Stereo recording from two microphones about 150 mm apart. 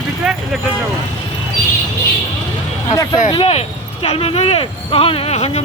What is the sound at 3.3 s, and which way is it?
Speech, 40° left (ahead or behind).